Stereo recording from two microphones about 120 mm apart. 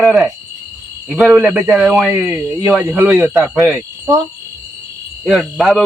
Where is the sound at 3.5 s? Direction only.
5° right (ahead or behind).